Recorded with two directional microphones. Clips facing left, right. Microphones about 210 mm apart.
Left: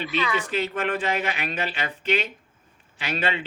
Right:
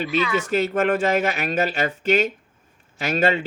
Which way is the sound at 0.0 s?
45° right (ahead or behind).